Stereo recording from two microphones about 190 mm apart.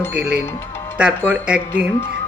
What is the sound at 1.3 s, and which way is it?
Speech, 5° right (ahead or behind).